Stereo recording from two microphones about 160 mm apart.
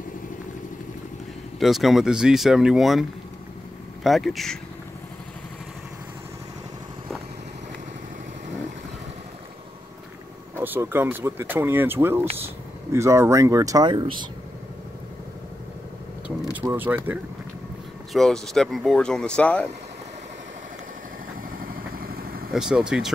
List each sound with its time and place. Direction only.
1.6 s speech: centre (ahead or behind)
10.5 s speech: 15° right (ahead or behind); by 14.2 s 30° right (ahead or behind)
16.6 s speech: 10° right (ahead or behind)
18.1 s speech: centre (ahead or behind)
21.5 s vehicle: 65° right (ahead or behind)
22.5 s speech: 5° right (ahead or behind)